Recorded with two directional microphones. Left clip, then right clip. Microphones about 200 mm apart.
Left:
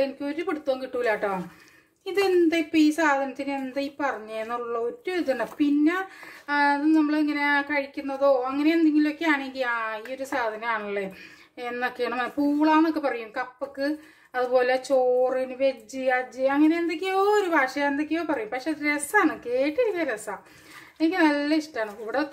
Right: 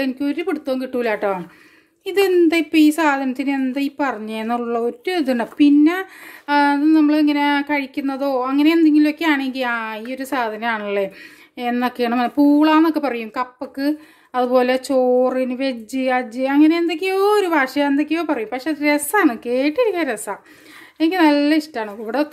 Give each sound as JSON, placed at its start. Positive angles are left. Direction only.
{"t": 0.0, "sound": "a woman's voice", "side_deg": -45}